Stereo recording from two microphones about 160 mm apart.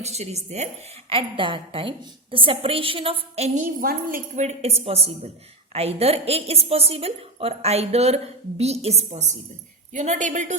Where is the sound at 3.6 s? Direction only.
60° right (ahead or behind).